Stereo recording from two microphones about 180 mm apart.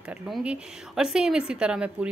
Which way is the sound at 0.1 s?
5° right (ahead or behind).